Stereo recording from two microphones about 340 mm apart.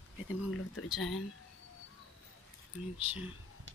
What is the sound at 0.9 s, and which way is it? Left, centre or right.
Speech, centre.